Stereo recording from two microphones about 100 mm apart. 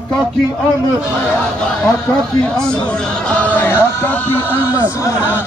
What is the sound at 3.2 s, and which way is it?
Music, 15° left (ahead or behind).